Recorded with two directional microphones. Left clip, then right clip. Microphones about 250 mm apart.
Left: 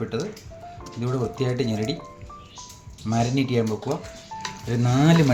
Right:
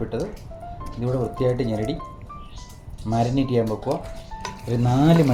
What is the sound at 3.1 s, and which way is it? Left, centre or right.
Speech, left.